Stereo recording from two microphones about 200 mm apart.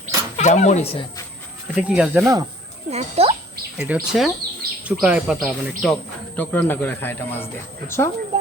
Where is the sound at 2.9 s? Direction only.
30° right (ahead or behind).